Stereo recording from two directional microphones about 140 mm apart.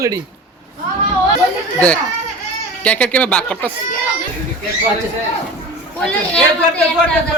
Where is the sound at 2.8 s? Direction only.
10° left (ahead or behind).